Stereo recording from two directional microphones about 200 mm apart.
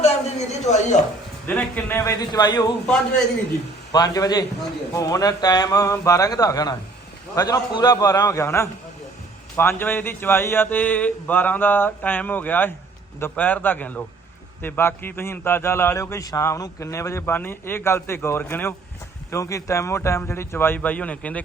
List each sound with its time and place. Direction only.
0.0 s a sound: 35° left (ahead or behind)
1.5 s a man's voice: 10° left (ahead or behind)
3.9 s a man's voice: 20° left (ahead or behind)